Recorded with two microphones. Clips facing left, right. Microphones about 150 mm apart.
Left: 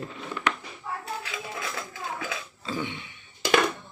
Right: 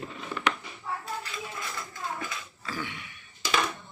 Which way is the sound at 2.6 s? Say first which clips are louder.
Left 4 dB; 25° left (ahead or behind).